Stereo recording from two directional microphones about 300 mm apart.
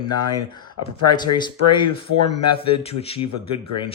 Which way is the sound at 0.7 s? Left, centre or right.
Left.